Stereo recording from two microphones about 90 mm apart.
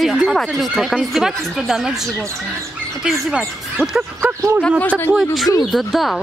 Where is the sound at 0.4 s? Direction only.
Centre (ahead or behind).